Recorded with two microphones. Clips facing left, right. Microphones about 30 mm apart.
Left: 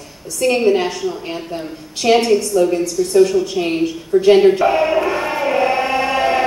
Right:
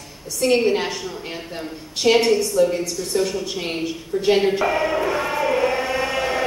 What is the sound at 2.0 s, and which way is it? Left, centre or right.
Speech, left.